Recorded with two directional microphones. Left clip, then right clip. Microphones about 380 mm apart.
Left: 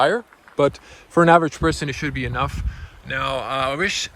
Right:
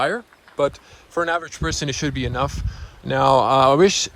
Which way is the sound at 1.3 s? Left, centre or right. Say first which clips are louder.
Left 8 dB; centre.